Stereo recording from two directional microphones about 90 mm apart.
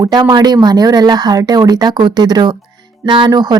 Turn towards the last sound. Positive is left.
turn(degrees=-50)  # may be behind; listen again after turning